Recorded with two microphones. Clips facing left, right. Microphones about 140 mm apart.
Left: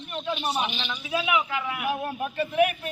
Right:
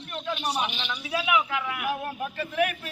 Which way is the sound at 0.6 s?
10° right (ahead or behind).